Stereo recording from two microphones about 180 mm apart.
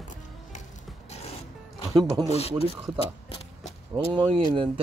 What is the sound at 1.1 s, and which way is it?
Zipper, 35° left (ahead or behind).